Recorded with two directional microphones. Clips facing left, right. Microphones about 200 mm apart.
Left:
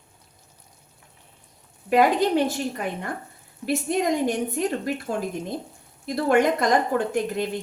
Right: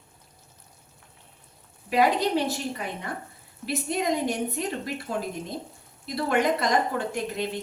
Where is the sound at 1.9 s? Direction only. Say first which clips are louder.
Left 3 dB; 50° left (ahead or behind).